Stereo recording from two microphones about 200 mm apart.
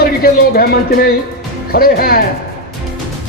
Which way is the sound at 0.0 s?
50° left (ahead or behind).